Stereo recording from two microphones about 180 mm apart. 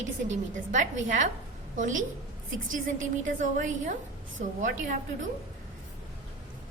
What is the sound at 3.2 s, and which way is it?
A woman's voice, 45° right (ahead or behind).